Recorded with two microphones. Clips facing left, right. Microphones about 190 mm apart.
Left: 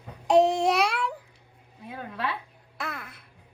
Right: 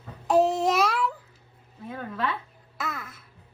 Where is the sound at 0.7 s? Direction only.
Centre (ahead or behind).